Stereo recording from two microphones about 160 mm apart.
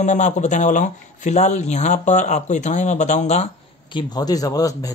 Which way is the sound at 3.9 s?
25° left (ahead or behind).